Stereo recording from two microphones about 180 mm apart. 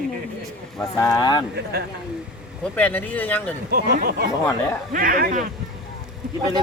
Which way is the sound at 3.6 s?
55° right (ahead or behind).